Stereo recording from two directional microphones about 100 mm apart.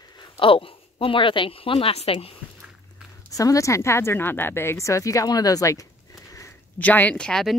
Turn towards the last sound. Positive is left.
turn(degrees=5)  # may be behind; listen again after turning